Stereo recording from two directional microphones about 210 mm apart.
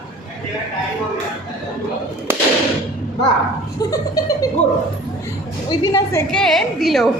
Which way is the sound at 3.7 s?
15° left (ahead or behind).